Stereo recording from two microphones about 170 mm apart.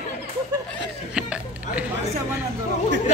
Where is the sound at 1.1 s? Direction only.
5° right (ahead or behind).